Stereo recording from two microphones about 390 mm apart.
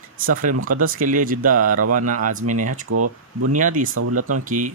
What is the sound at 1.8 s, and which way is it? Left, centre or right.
Speech, right.